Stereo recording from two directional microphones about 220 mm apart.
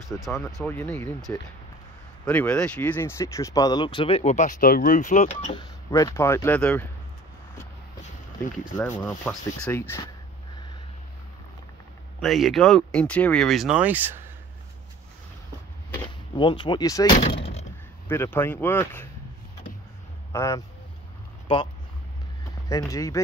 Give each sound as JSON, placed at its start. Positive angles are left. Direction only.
{"t": 0.1, "sound": "speech", "side_deg": 10}
{"t": 8.7, "sound": "speech", "side_deg": 10}
{"t": 12.2, "sound": "speech", "side_deg": 0}
{"t": 16.3, "sound": "speech", "side_deg": 20}
{"t": 17.1, "sound": "door", "side_deg": 25}
{"t": 18.0, "sound": "speech", "side_deg": 10}
{"t": 20.3, "sound": "speech", "side_deg": 15}